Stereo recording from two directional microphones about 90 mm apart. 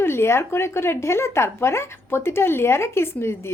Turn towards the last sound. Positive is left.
turn(degrees=30)  # may be behind; listen again after turning